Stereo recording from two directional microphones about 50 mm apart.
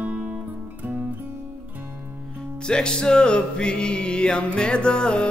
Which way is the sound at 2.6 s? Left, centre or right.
Centre.